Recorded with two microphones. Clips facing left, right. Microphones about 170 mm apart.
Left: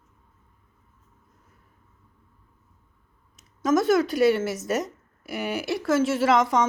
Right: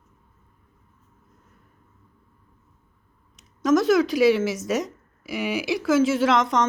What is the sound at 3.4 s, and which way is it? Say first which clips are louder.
Speech: right 2 dB; centre (ahead or behind).